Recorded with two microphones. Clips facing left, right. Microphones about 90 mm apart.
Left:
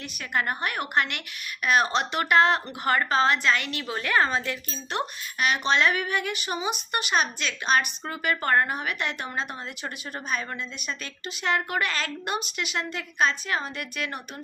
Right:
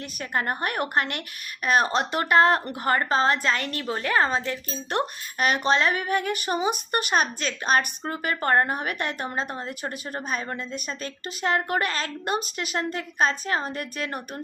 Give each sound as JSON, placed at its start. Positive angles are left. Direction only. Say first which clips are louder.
{"t": 0.2, "sound": "a woman's voice", "louder": "right 1 dB", "side_deg": -35}